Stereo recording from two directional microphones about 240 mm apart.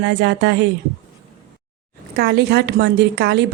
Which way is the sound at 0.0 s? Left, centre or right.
Right.